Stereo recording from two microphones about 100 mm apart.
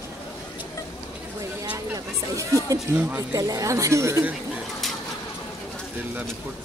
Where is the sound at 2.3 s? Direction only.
30° right (ahead or behind).